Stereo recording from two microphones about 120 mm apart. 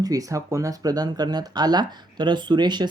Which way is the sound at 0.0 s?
30° right (ahead or behind).